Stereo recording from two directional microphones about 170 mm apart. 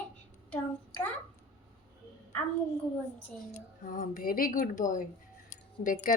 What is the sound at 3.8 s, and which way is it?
A woman's voice, 55° left (ahead or behind).